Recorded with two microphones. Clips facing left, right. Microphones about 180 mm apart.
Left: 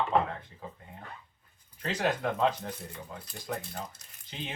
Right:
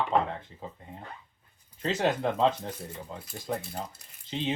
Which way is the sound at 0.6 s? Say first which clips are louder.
Right 2 dB; 25° right (ahead or behind).